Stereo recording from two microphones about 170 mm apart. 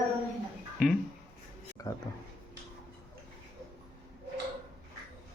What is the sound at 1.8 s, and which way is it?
Speech, 20° left (ahead or behind).